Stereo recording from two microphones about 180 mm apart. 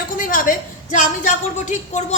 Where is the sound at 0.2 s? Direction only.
50° left (ahead or behind).